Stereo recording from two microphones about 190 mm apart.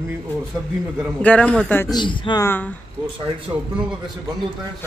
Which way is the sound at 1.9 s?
25° left (ahead or behind).